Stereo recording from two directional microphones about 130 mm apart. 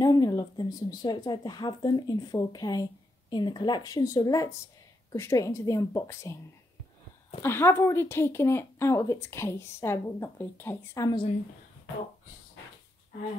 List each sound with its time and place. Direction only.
0.0 s a woman's voice: 30° left (ahead or behind)
7.4 s speech: 20° left (ahead or behind)